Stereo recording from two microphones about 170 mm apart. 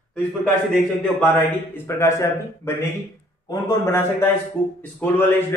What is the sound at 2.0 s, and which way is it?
A man's voice, 15° left (ahead or behind).